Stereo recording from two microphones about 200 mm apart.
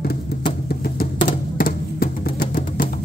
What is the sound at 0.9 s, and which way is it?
Music, 50° left (ahead or behind).